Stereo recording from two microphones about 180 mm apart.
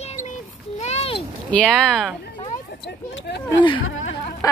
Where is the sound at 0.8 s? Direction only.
35° left (ahead or behind).